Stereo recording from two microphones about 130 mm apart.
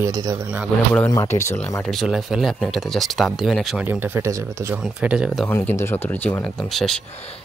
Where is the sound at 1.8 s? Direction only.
Centre (ahead or behind).